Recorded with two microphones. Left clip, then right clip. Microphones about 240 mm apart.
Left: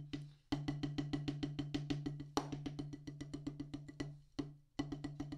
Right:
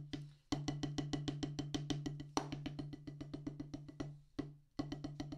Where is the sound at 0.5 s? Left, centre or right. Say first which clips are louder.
Even; right.